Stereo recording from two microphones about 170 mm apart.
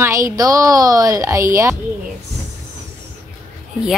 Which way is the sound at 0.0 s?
20° right (ahead or behind).